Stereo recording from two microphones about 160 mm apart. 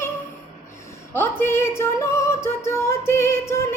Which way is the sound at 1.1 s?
15° left (ahead or behind).